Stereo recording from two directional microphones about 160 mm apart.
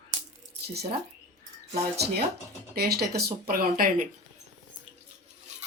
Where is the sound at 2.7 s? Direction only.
80° right; by 4.0 s 65° right (ahead or behind).